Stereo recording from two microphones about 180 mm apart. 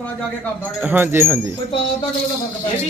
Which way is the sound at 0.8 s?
10° right (ahead or behind).